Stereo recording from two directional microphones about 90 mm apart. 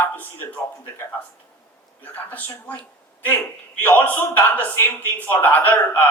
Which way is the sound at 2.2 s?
20° left (ahead or behind).